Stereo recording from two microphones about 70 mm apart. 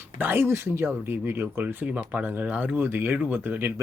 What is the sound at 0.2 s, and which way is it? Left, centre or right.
Speech, right.